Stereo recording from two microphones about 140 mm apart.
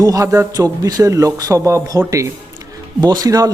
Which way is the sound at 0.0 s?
25° right (ahead or behind).